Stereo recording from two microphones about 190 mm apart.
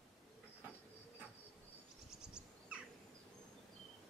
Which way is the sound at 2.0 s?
5° right (ahead or behind).